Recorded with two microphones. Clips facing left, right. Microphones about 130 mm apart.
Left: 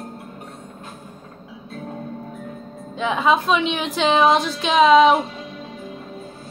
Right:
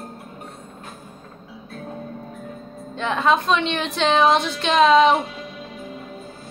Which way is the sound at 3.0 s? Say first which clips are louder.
Left 1 dB; 5° left (ahead or behind).